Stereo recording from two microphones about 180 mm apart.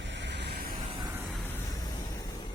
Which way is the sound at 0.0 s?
75° right (ahead or behind).